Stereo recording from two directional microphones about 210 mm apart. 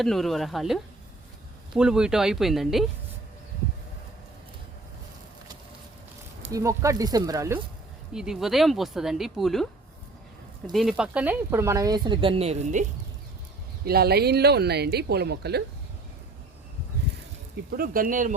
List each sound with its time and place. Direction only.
0.0 s speech: centre (ahead or behind)
6.5 s speech: 15° right (ahead or behind)
8.1 s speech: 5° right (ahead or behind)
10.7 s speech: centre (ahead or behind); by 12.8 s 35° right (ahead or behind)
13.8 s speech: 50° right (ahead or behind)
17.7 s speech: 45° right (ahead or behind)